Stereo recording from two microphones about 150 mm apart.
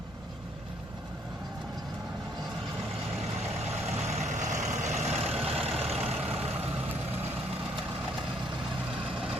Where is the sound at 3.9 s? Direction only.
50° right (ahead or behind).